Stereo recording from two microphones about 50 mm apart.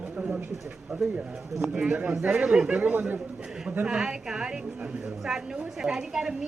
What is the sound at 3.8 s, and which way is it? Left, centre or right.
A woman's voice, centre.